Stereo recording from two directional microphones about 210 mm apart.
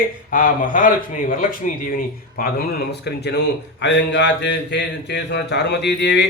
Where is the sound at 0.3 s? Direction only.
40° left (ahead or behind).